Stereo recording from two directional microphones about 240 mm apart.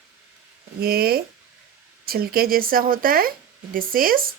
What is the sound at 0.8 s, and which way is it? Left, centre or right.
Speech, right.